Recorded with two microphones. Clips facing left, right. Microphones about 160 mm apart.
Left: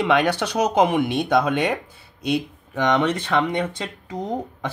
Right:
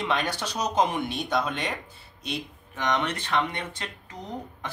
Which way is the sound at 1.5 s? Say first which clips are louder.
Left 10 dB; 65° left (ahead or behind).